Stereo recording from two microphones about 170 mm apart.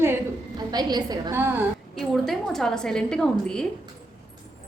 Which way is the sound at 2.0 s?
Centre (ahead or behind).